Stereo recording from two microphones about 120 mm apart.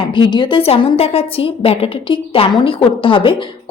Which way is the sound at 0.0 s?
45° left (ahead or behind).